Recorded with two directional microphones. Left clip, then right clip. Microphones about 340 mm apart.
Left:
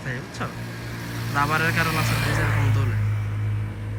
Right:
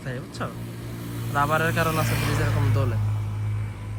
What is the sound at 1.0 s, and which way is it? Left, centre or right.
Vehicle, centre.